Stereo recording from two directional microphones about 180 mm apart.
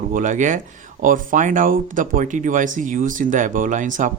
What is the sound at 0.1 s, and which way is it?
Speech, 45° right (ahead or behind).